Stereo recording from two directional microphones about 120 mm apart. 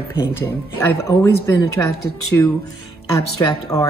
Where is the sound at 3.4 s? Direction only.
30° left (ahead or behind).